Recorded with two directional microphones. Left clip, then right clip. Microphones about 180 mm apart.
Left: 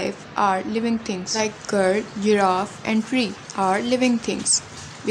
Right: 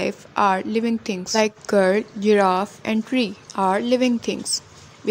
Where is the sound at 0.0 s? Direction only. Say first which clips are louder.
Right 2 dB; 40° right (ahead or behind).